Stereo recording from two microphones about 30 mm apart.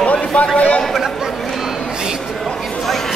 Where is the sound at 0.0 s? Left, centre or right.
Left.